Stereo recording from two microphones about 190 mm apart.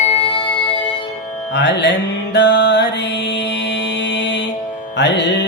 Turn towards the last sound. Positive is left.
turn(degrees=65)  # may be behind; listen again after turning